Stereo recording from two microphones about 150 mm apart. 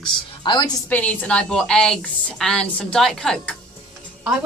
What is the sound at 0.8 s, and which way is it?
A woman's voice, 10° left (ahead or behind).